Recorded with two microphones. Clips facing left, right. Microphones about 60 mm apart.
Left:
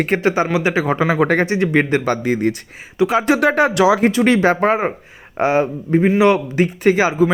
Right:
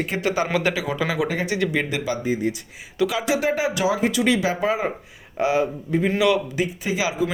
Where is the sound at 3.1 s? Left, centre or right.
Left.